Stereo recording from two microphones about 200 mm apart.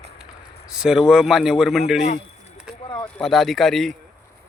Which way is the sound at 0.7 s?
5° right (ahead or behind).